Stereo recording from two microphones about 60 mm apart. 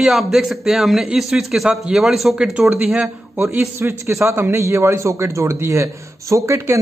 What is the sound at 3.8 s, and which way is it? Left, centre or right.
A man's voice, right.